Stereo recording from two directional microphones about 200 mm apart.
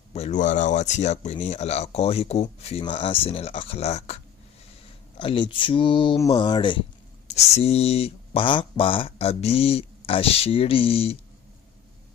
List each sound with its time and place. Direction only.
0.1 s speech: 35° left (ahead or behind)
5.2 s speech: 25° left (ahead or behind)